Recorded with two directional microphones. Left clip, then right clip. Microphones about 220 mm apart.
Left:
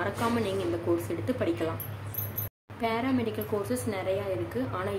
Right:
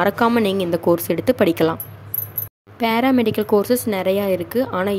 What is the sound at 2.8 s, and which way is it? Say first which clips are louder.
A woman's voice: right 12 dB; 50° right (ahead or behind).